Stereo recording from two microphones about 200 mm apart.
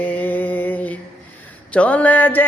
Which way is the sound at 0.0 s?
10° left (ahead or behind).